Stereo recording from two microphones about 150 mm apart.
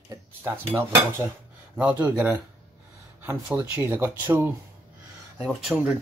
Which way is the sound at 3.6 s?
15° right (ahead or behind).